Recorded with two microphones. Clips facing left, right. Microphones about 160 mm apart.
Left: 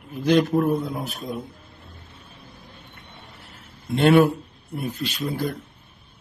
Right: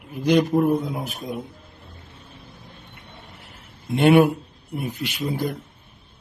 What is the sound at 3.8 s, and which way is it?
A man's voice, 15° right (ahead or behind).